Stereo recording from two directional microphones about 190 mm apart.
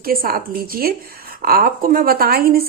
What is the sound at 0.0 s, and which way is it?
Speech, 50° right (ahead or behind).